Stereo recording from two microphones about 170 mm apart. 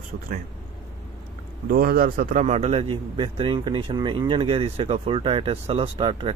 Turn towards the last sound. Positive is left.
turn(degrees=-30)  # may be behind; listen again after turning